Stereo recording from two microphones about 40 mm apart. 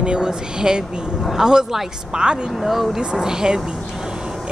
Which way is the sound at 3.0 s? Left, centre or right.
Centre.